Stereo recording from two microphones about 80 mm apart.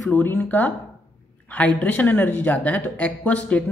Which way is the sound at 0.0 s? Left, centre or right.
Left.